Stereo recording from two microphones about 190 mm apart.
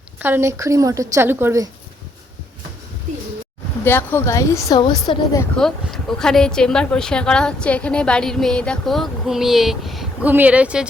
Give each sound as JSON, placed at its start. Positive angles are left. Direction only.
{"t": 0.2, "sound": "a woman's voice", "side_deg": -10}
{"t": 3.8, "sound": "a woman's voice", "side_deg": 10}
{"t": 5.5, "sound": "a woman's voice", "side_deg": 0}